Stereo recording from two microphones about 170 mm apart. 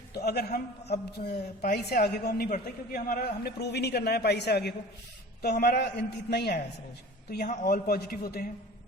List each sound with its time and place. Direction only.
0.1 s a man's voice: 70° left (ahead or behind)
7.4 s a man's voice: 55° left (ahead or behind)